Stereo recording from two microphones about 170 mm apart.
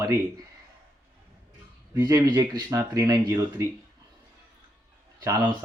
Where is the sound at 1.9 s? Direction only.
25° right (ahead or behind).